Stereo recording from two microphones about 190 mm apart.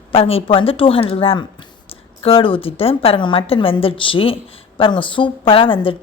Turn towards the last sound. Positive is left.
turn(degrees=30)  # may be behind; listen again after turning